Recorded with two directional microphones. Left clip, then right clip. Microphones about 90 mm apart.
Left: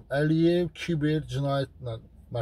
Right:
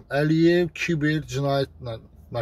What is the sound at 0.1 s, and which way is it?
A man's voice, 30° left (ahead or behind).